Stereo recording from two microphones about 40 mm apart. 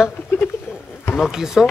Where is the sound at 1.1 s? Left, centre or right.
Centre.